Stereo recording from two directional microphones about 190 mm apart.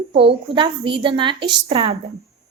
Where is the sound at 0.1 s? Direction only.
30° right (ahead or behind).